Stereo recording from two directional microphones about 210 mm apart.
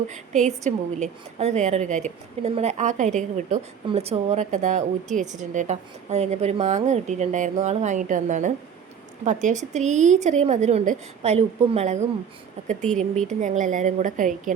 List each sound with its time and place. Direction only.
0.1 s a woman's voice: 35° right (ahead or behind)